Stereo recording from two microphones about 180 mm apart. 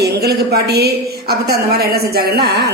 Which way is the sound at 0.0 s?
65° right (ahead or behind).